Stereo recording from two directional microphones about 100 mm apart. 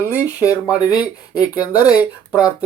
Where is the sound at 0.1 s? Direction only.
30° left (ahead or behind).